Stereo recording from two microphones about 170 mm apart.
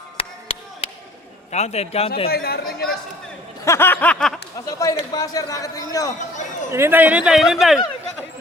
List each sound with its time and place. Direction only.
0.2 s a sound: 35° left (ahead or behind)
1.5 s a man's voice: 40° left (ahead or behind)
2.3 s speech: 65° left (ahead or behind)
3.6 s snicker: 15° left (ahead or behind)
4.5 s a man's voice: 20° left (ahead or behind)
6.7 s a man's voice: 15° right (ahead or behind)